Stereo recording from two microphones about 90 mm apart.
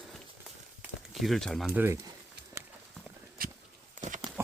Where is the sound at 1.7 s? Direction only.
25° right (ahead or behind).